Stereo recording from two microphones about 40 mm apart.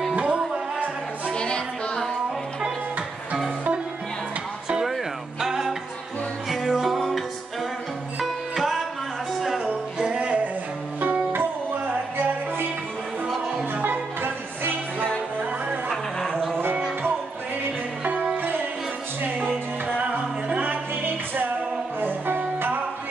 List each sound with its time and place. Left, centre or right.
0.1 s music: right
1.3 s a sound: left
5.4 s music: centre
9.9 s music: right
11.0 s music: right
13.8 s music: right
15.9 s a sound: centre
18.0 s music: right
20.0 s music: right
21.0 s music: right